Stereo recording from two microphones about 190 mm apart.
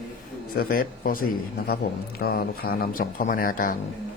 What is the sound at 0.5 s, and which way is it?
A man's voice, 50° left (ahead or behind).